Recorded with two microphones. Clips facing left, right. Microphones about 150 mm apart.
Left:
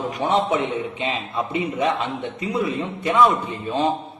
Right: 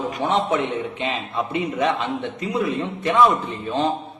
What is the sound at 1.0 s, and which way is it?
A man's voice, centre (ahead or behind).